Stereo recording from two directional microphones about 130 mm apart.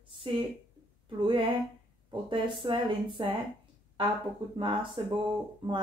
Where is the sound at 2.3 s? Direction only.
40° right (ahead or behind).